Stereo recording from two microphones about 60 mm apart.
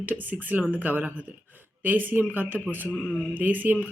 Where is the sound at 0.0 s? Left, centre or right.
Right.